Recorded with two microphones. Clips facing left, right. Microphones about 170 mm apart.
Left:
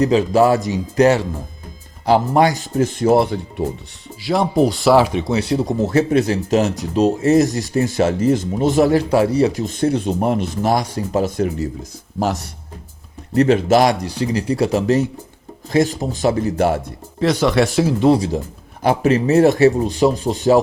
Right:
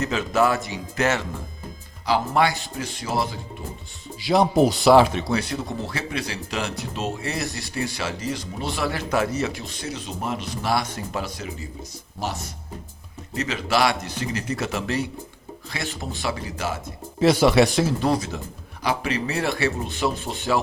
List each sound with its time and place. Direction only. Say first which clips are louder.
0.0 s speech: left 8 dB; 35° left (ahead or behind); by 3.4 s 60° left (ahead or behind)
4.2 s speech: left 2 dB; centre (ahead or behind)
5.2 s speech: left 7 dB; 25° left (ahead or behind); by 11.7 s 60° left (ahead or behind)
12.2 s speech: left 9 dB; 90° left
13.3 s speech: left 11 dB; 55° left (ahead or behind)
17.2 s speech: left 1 dB; 10° right (ahead or behind)
18.0 s speech: left 9 dB; 30° left (ahead or behind)
18.8 s speech: left 9 dB; 50° left (ahead or behind)